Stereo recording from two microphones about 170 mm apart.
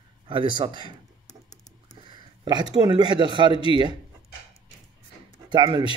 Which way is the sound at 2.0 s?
25° right (ahead or behind).